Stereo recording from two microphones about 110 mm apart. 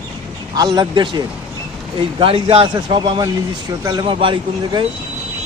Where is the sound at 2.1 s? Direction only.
55° right (ahead or behind).